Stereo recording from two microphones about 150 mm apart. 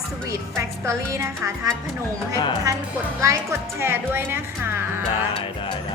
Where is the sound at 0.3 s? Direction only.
20° right (ahead or behind).